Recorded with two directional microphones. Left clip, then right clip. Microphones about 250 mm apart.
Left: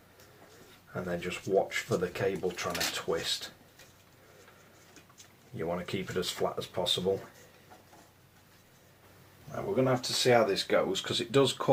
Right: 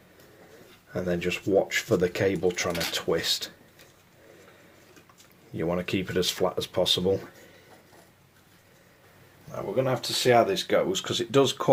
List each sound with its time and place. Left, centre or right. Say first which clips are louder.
1.0 s speech: right 7 dB; right
5.5 s speech: right 6 dB; right
9.7 s speech: right 2 dB; right